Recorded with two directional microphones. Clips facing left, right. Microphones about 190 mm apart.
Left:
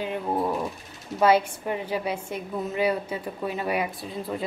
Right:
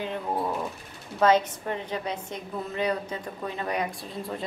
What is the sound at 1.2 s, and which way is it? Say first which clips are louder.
A woman's voice: left 1 dB; 10° left (ahead or behind).